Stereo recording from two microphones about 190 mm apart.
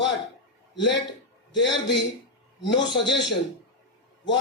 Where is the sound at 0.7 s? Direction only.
70° left (ahead or behind).